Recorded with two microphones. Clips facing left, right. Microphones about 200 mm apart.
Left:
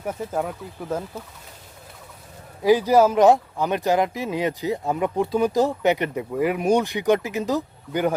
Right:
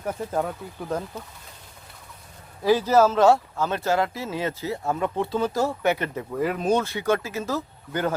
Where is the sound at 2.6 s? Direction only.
15° left (ahead or behind).